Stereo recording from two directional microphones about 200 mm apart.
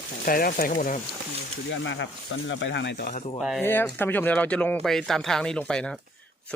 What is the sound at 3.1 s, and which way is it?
Speech, 35° left (ahead or behind).